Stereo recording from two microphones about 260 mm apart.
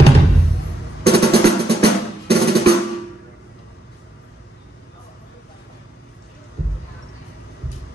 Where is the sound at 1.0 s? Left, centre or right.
Right.